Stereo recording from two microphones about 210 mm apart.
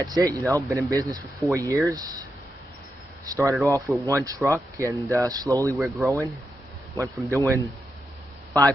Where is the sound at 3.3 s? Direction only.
15° right (ahead or behind).